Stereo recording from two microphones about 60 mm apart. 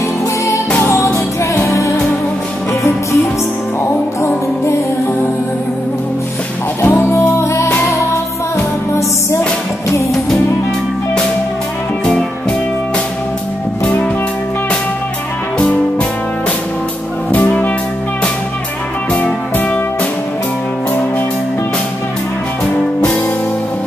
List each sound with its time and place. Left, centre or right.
0.8 s music: left
6.8 s music: left
17.3 s music: left